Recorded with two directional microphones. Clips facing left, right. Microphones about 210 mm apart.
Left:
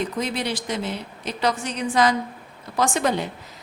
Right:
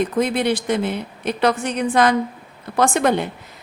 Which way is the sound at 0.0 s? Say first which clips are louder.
Right 7 dB; 55° right (ahead or behind).